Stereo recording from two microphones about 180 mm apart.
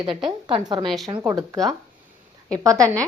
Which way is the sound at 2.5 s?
20° right (ahead or behind).